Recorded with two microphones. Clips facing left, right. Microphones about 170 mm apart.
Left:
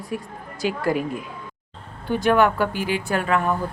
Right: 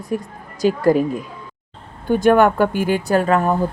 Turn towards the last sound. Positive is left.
turn(degrees=-40)  # may be behind; listen again after turning